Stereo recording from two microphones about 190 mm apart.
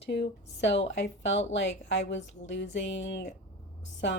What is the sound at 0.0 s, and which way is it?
A woman's voice, 65° left (ahead or behind).